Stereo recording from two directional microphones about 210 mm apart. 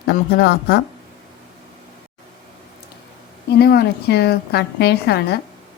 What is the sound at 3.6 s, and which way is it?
A woman's voice, 50° left (ahead or behind).